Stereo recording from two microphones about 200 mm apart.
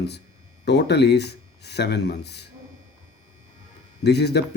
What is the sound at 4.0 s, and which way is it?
Speech, 55° left (ahead or behind).